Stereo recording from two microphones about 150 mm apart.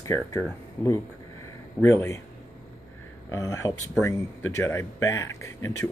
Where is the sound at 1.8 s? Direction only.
20° left (ahead or behind).